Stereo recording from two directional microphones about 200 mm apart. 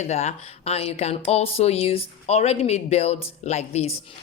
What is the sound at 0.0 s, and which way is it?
Speech, 35° left (ahead or behind).